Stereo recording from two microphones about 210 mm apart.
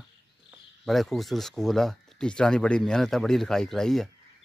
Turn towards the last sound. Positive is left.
turn(degrees=0)  # may be behind; listen again after turning